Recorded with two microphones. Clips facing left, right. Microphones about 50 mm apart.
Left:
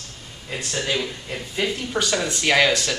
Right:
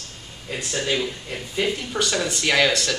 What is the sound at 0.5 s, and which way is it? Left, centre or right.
Speech, centre.